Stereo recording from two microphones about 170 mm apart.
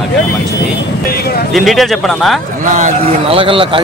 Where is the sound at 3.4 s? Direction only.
30° right (ahead or behind).